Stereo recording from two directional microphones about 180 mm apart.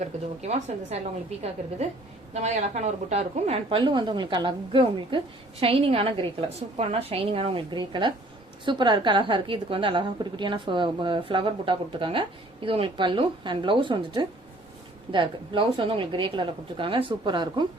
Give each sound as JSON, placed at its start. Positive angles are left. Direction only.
{"t": 0.0, "sound": "a woman's voice", "side_deg": -40}
{"t": 2.3, "sound": "a woman's voice", "side_deg": -40}